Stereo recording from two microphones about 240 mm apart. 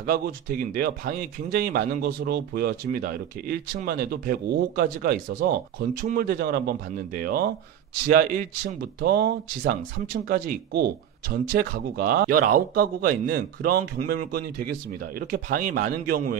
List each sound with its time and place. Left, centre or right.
0.0 s speech: right